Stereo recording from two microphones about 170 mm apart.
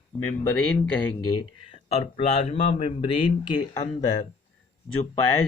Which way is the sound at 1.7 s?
35° left (ahead or behind).